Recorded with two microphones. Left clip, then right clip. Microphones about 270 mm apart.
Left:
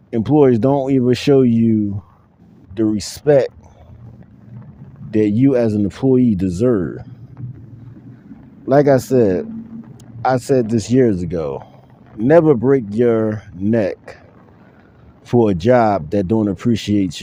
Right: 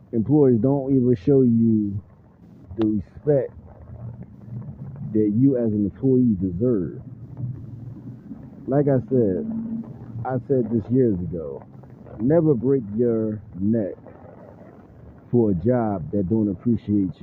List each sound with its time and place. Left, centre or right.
0.1 s speech: left
3.2 s speech: left
5.1 s speech: left
8.7 s speech: left
15.3 s speech: left